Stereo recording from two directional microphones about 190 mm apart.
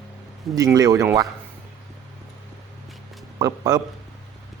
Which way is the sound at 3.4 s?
20° right (ahead or behind).